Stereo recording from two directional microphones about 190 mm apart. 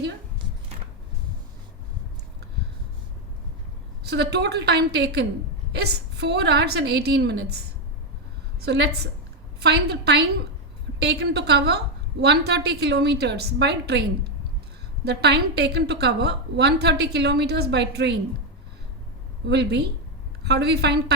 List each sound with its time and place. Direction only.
4.0 s a woman's voice: 60° right (ahead or behind)
8.6 s a woman's voice: 60° right (ahead or behind)
19.5 s a woman's voice: 65° right (ahead or behind)